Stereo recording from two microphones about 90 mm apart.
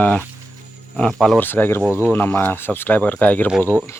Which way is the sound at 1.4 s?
25° left (ahead or behind).